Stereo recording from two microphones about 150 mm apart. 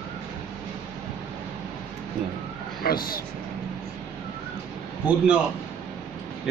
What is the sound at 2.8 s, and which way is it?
Speech, 80° left.